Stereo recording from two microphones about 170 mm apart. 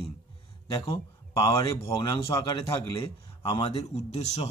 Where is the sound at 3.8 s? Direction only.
40° left (ahead or behind).